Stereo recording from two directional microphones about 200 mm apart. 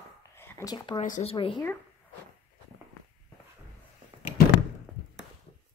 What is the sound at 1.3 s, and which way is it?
Speech, 25° left (ahead or behind).